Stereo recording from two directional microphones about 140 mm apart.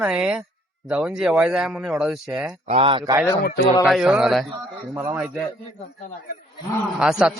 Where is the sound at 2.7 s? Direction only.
40° right (ahead or behind).